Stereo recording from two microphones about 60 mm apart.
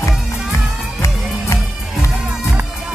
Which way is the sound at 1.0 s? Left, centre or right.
Left.